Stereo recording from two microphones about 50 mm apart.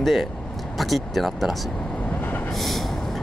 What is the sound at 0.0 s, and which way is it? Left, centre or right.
Speech, centre.